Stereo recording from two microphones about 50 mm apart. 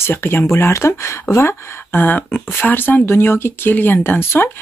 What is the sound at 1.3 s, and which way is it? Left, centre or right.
Speech, left.